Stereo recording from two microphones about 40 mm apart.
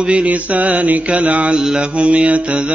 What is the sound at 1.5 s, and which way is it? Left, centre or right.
Mantra, right.